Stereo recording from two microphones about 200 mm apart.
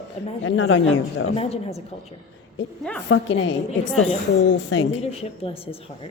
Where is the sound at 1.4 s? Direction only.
30° left (ahead or behind).